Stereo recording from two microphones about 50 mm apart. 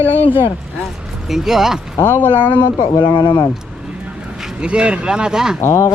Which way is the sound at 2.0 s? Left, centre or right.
Left.